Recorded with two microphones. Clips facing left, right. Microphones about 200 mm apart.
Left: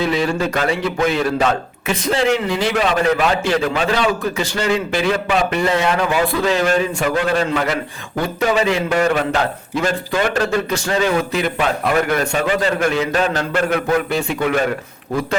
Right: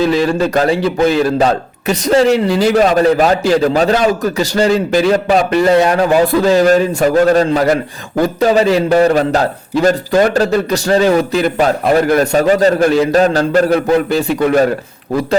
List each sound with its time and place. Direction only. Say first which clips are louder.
0.0 s speech: right 6 dB; 35° right (ahead or behind)